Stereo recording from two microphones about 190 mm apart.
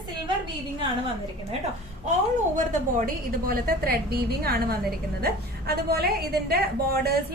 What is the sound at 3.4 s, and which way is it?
A woman's voice, 50° right (ahead or behind).